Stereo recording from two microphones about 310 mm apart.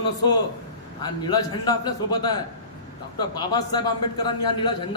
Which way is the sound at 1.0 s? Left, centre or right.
Centre.